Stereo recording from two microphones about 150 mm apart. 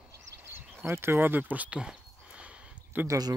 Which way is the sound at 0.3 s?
10° right (ahead or behind).